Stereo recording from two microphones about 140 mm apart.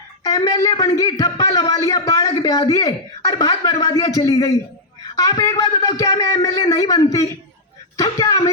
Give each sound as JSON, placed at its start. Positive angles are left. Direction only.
{"t": 0.3, "sound": "a woman's voice", "side_deg": 25}